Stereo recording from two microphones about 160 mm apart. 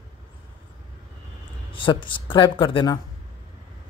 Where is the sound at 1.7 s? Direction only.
30° left (ahead or behind).